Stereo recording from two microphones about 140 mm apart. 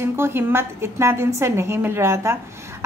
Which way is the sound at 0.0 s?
15° right (ahead or behind).